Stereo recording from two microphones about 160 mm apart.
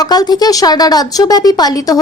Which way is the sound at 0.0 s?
25° left (ahead or behind).